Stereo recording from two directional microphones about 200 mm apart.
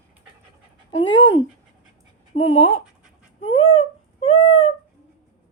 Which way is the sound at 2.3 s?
25° left (ahead or behind).